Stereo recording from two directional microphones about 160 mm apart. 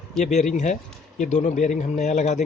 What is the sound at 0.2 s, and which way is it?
Speech, 50° left (ahead or behind).